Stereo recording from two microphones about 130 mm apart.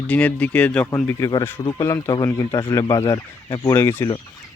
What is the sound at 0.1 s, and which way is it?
Speech, 10° left (ahead or behind).